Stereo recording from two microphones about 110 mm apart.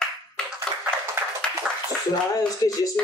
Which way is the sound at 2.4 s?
30° left (ahead or behind).